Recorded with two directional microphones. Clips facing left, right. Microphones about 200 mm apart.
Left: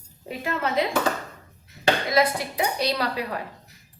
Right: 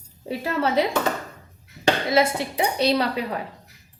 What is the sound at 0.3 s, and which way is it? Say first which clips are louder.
Speech: right 4 dB; 30° right (ahead or behind).